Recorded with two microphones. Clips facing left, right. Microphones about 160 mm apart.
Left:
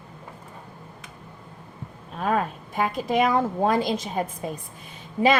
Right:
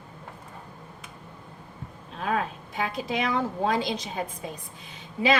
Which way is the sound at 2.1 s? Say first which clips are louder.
Left 4 dB; 45° left (ahead or behind).